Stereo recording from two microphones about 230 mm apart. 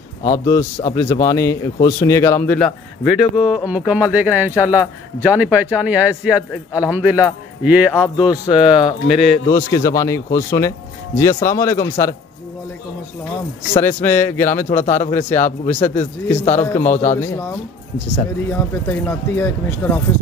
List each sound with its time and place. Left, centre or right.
0.3 s a man's voice: centre
9.5 s speech: centre
13.7 s speech: centre
14.7 s a man's voice: left
17.2 s speech: centre
18.5 s speech: centre